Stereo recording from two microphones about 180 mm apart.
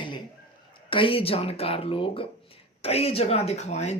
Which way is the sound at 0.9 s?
30° left (ahead or behind).